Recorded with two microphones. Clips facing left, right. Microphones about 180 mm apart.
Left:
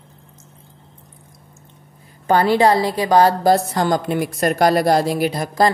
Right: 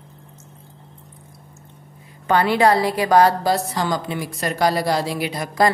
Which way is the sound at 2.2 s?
35° left (ahead or behind).